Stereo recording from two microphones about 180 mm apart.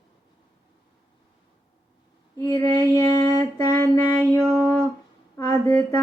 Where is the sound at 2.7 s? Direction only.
25° right (ahead or behind).